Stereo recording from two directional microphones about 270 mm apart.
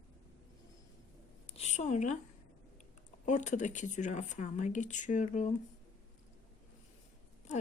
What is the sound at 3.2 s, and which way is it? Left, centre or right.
Speech, left.